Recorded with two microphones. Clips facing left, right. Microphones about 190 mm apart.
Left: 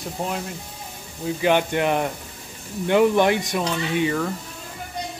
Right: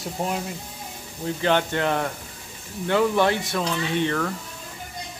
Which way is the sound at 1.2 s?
10° left (ahead or behind).